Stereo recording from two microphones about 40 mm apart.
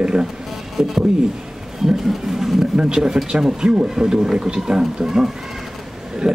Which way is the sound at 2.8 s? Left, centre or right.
Centre.